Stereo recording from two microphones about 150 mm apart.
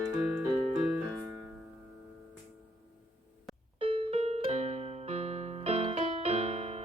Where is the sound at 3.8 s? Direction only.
40° right (ahead or behind).